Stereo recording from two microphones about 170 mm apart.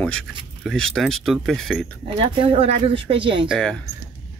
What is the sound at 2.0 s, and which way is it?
Speech, 35° right (ahead or behind).